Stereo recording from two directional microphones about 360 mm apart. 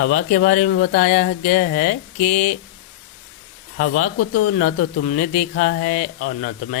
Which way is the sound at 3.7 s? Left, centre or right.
Left.